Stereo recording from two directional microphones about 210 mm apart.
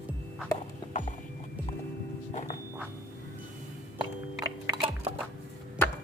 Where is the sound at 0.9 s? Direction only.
35° left (ahead or behind).